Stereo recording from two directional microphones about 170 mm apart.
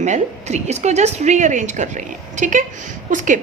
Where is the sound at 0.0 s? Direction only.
40° right (ahead or behind).